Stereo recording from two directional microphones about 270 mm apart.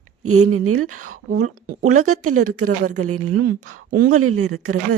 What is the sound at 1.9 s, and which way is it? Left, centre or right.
Speech, right.